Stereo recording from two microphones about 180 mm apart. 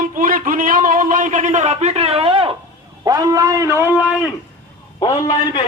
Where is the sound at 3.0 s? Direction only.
20° right (ahead or behind).